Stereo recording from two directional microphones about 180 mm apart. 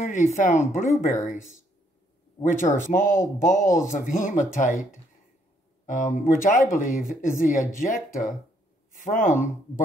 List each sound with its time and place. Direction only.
0.0 s a woman's voice: 45° left (ahead or behind)
2.5 s speech: 45° left (ahead or behind)
5.9 s speech: 45° left (ahead or behind)